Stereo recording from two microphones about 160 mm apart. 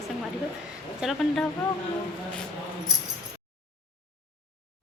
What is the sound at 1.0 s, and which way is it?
Speech, centre (ahead or behind).